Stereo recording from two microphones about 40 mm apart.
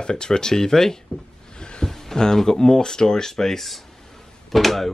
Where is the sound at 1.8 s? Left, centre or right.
Centre.